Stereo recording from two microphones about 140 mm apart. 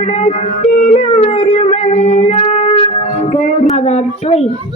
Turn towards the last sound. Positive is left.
turn(degrees=50)  # may be behind; listen again after turning